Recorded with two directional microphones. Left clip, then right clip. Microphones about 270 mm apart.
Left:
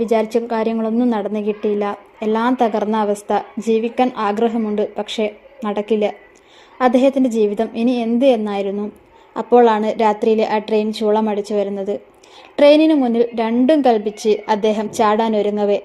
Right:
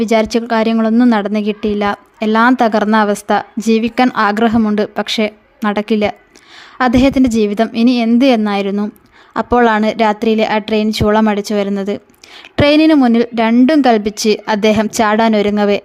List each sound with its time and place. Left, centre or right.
0.1 s a woman's voice: right